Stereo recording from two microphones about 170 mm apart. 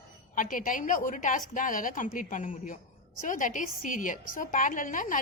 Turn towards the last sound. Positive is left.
turn(degrees=50)  # may be behind; listen again after turning